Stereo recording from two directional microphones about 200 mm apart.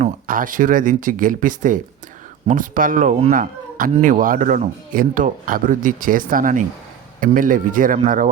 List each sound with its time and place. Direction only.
0.0 s speech: 45° right (ahead or behind)